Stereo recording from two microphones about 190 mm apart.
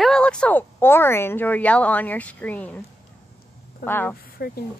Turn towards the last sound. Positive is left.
turn(degrees=50)  # may be behind; listen again after turning